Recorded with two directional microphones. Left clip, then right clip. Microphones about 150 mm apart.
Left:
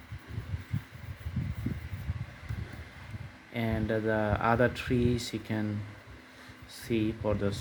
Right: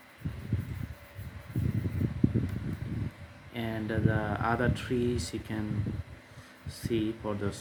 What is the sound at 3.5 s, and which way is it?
Speech, 40° left (ahead or behind).